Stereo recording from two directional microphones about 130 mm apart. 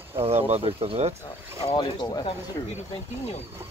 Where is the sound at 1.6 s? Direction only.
35° left (ahead or behind).